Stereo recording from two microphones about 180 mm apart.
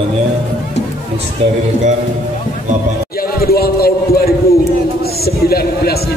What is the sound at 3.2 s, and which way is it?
A man's voice, 55° left (ahead or behind).